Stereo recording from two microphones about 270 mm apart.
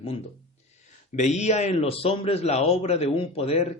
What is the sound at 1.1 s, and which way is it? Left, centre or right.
A man's voice, left.